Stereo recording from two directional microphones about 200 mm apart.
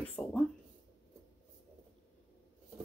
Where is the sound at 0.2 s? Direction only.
5° left (ahead or behind).